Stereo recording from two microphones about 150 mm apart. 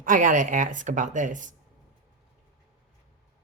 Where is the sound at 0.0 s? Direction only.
60° right (ahead or behind).